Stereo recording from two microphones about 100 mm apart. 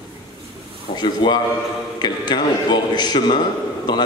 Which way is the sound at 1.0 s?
45° left (ahead or behind).